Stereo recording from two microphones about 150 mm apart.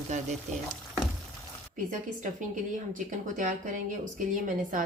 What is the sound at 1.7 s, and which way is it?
A woman's voice, 55° right (ahead or behind).